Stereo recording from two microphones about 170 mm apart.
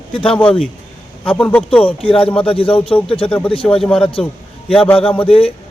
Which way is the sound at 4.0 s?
30° left (ahead or behind).